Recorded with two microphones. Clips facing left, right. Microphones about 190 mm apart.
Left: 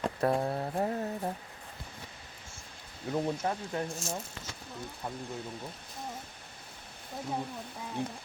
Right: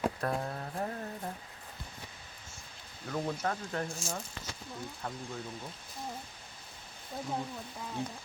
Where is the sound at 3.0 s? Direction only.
25° left (ahead or behind).